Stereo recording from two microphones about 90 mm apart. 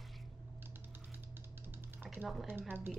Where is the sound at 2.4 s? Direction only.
20° right (ahead or behind).